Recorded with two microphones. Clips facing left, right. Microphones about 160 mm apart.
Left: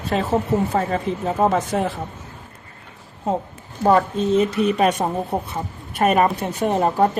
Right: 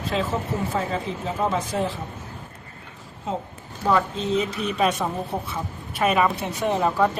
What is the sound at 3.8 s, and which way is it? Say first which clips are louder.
A woman's voice: left 5 dB; 50° left (ahead or behind).